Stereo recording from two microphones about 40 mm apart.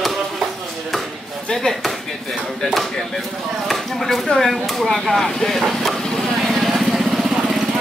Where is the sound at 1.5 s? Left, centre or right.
Centre.